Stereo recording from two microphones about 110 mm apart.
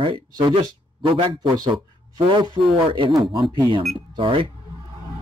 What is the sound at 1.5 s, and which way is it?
Speech, 40° right (ahead or behind).